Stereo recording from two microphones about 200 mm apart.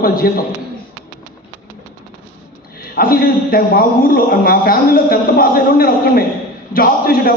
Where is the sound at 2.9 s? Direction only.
45° left (ahead or behind).